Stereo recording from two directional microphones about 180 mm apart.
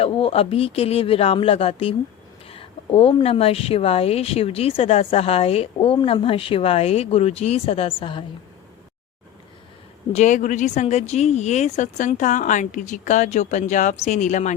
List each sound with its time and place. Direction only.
0.0 s a woman's voice: 30° left (ahead or behind)
10.2 s a woman's voice: 45° left (ahead or behind)